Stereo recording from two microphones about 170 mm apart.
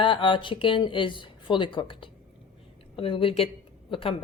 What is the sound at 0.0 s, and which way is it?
A woman's voice, 30° left (ahead or behind).